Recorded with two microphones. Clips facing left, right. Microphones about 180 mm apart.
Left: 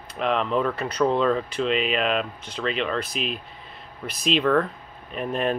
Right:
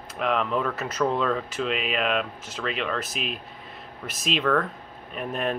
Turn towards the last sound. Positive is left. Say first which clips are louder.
# left 3 dB
turn(degrees=0)  # may be behind; listen again after turning